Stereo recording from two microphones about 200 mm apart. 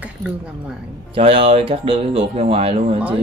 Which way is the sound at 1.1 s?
30° right (ahead or behind).